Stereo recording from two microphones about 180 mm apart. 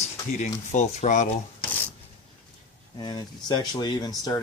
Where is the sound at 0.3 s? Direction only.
40° left (ahead or behind).